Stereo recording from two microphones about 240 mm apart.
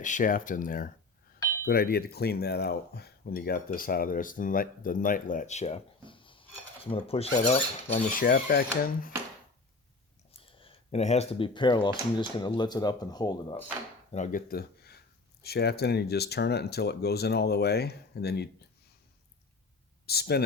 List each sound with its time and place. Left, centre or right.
0.0 s speech: left
10.3 s speech: left
14.1 s speech: left
20.1 s speech: left